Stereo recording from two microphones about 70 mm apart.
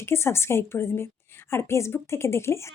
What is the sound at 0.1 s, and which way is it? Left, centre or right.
A woman's voice, left.